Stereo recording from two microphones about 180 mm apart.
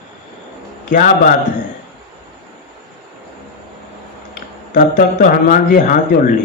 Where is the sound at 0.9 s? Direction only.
50° left (ahead or behind).